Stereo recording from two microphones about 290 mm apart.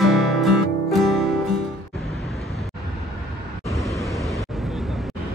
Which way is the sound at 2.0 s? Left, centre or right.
Centre.